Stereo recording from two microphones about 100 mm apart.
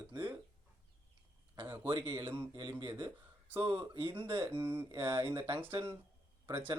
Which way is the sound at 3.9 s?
55° right (ahead or behind).